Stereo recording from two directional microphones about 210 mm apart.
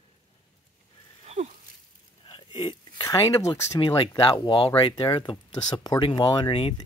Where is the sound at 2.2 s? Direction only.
25° left (ahead or behind).